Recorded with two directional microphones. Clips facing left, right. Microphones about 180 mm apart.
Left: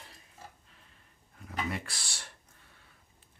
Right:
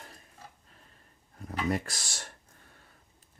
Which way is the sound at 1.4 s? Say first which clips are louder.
Right 5 dB; 40° right (ahead or behind).